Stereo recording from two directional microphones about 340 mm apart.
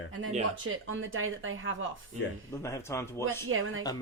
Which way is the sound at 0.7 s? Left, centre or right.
Right.